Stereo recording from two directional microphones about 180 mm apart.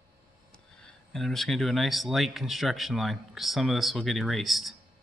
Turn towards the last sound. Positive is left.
turn(degrees=0)  # may be behind; listen again after turning